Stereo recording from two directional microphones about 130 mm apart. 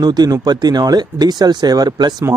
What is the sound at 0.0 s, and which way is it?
Speech, 30° right (ahead or behind).